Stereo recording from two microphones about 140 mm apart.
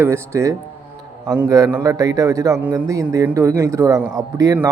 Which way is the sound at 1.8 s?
25° right (ahead or behind).